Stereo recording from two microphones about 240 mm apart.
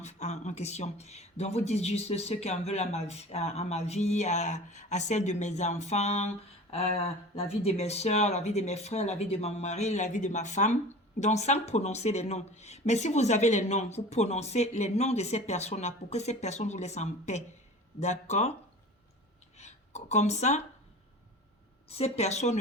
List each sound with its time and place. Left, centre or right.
0.0 s speech: left
19.5 s a sound: left
21.8 s speech: left